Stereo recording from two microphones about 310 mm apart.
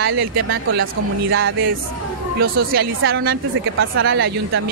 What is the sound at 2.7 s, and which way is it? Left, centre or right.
A woman's voice, right.